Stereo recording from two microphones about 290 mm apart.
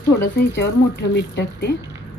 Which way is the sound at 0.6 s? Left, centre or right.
Left.